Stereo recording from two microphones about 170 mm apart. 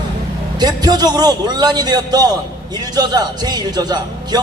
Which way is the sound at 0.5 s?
25° right (ahead or behind).